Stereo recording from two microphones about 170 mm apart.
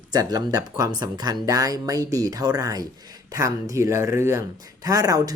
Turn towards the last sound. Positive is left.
turn(degrees=-20)  # may be behind; listen again after turning